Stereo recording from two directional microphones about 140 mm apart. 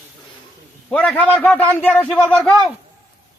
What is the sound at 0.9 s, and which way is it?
A man's voice, 10° left (ahead or behind).